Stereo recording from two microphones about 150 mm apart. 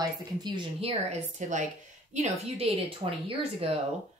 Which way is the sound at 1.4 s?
55° right (ahead or behind).